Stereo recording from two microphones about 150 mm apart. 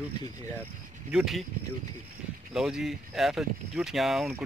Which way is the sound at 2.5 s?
5° right (ahead or behind).